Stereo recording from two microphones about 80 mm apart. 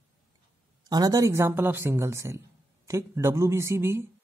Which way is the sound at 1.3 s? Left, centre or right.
Right.